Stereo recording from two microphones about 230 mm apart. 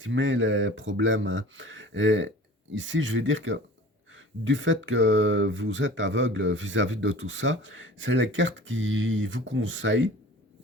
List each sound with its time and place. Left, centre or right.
0.0 s speech: right